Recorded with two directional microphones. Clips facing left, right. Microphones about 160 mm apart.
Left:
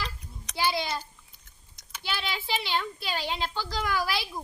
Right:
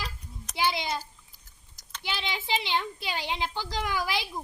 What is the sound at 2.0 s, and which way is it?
A child's voice, 20° right (ahead or behind).